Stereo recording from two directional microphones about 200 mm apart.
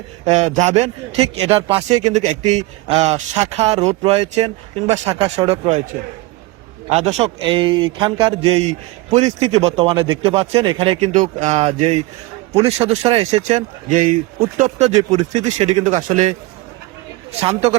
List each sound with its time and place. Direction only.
0.3 s a man's voice: 35° right (ahead or behind)
6.8 s a man's voice: 35° right (ahead or behind)
14.8 s a man's voice: 30° right (ahead or behind)
17.4 s a man's voice: 35° right (ahead or behind)